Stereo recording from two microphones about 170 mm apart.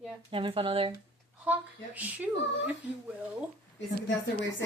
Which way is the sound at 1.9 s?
10° right (ahead or behind).